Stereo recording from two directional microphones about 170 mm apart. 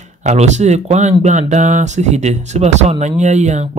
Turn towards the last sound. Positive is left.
turn(degrees=-45)  # may be behind; listen again after turning